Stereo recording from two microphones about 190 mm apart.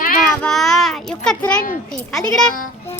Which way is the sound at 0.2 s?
Centre (ahead or behind).